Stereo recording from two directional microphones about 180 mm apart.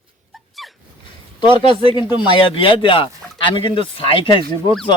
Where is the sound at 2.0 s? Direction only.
25° left (ahead or behind).